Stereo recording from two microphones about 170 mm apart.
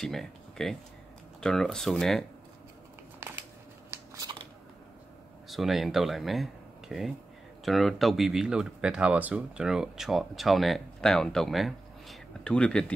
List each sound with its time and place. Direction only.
0.0 s speech: centre (ahead or behind)
4.1 s scissors: 25° right (ahead or behind)
5.5 s speech: centre (ahead or behind)